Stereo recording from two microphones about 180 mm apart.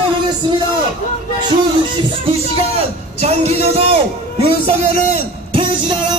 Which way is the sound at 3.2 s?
35° right (ahead or behind).